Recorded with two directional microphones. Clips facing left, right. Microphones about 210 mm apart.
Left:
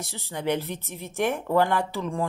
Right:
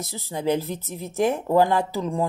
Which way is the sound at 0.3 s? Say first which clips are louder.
Right 3 dB; 35° right (ahead or behind).